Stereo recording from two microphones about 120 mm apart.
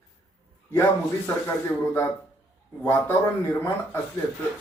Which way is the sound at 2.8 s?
20° left (ahead or behind).